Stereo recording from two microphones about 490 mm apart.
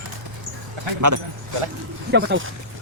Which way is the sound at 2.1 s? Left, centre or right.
Right.